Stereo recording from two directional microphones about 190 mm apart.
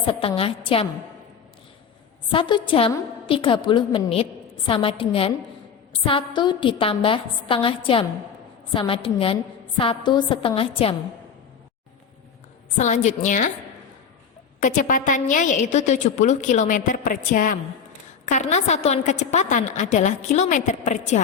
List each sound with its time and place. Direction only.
0.1 s a woman's voice: 30° left (ahead or behind)
2.3 s a woman's voice: 25° left (ahead or behind)
12.7 s a woman's voice: 40° left (ahead or behind)
14.6 s a woman's voice: 40° left (ahead or behind)